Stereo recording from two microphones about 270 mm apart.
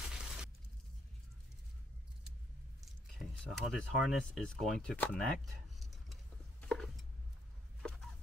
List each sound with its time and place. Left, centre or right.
0.1 s shatter: centre
2.8 s speech: centre
6.6 s a sound: centre